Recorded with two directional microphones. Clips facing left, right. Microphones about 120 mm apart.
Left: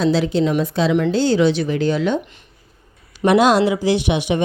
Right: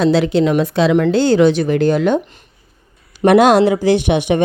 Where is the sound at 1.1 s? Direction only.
55° right (ahead or behind).